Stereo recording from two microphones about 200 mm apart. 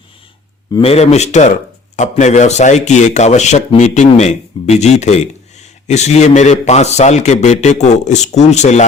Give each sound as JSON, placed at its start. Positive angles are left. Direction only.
{"t": 0.7, "sound": "speech", "side_deg": 30}